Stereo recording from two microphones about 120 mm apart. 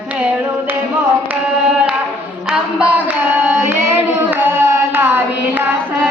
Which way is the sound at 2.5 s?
10° right (ahead or behind).